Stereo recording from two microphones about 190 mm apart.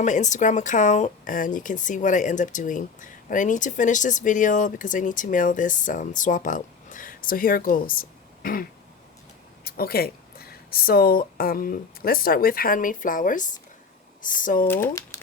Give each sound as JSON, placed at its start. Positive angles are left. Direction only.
{"t": 0.0, "sound": "a woman's voice", "side_deg": 40}
{"t": 9.6, "sound": "a woman's voice", "side_deg": 55}
{"t": 14.7, "sound": "speech", "side_deg": 15}